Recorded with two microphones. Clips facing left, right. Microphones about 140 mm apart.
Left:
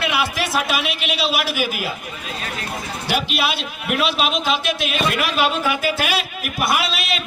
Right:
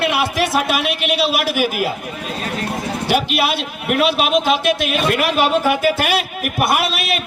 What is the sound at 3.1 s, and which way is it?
A man's voice, 50° right (ahead or behind).